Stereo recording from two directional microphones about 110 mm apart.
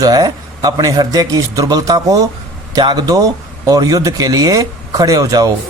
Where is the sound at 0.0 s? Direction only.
35° right (ahead or behind).